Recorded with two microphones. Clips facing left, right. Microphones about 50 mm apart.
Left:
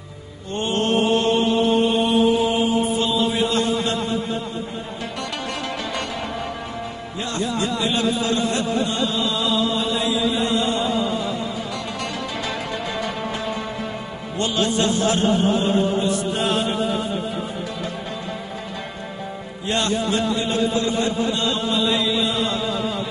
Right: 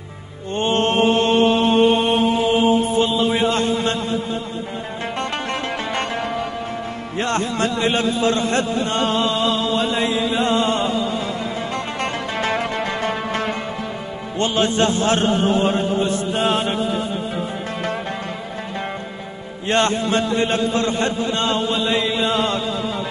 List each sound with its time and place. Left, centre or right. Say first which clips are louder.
0.5 s mantra: right 3 dB; right
3.0 s mantra: right 3 dB; right
3.4 s a man's voice: right 2 dB; right
5.0 s music: right 5 dB; right
7.2 s a man's voice: right 4 dB; right
11.7 s music: right 4 dB; right
14.3 s a man's voice: right 2 dB; right
16.3 s mantra: right 5 dB; right
19.6 s a man's voice: right 4 dB; right